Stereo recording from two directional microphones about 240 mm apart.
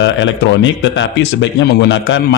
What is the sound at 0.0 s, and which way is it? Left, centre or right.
Speech, left.